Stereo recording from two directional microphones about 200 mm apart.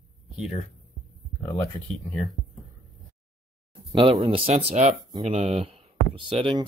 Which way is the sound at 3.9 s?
25° right (ahead or behind).